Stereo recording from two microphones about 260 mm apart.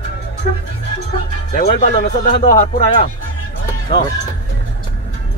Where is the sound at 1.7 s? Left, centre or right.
Left.